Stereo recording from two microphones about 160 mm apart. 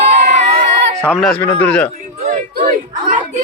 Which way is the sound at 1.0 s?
5° left (ahead or behind).